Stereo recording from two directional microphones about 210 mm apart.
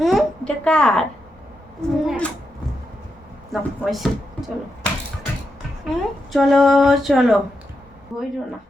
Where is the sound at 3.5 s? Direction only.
Centre (ahead or behind).